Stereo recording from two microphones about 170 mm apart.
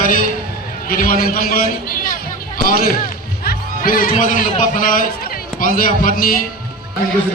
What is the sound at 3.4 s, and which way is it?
A man's voice, 60° left (ahead or behind).